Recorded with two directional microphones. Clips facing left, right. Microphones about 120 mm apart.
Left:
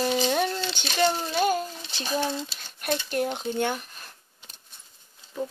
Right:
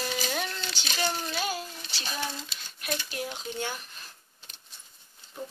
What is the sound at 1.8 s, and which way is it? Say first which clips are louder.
Speech: left 7 dB; 30° left (ahead or behind).